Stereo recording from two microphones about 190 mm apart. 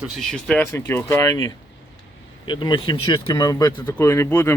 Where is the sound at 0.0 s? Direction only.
Centre (ahead or behind).